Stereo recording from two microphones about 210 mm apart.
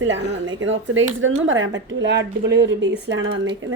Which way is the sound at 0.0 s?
65° right (ahead or behind).